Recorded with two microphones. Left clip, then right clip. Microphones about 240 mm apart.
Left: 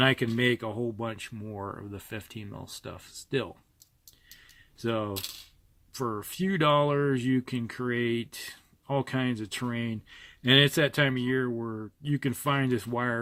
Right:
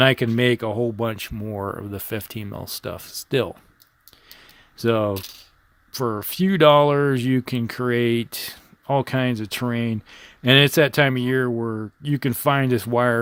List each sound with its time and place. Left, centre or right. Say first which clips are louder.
0.0 s speech: right 7 dB; right
4.3 s a sound: right 7 dB; right
5.9 s speech: right 8 dB; right